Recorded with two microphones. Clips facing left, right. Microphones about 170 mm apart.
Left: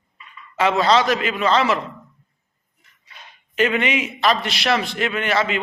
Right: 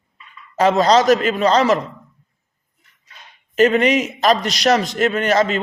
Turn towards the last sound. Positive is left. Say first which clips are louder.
# right 5 dB
turn(degrees=-40)  # may be behind; listen again after turning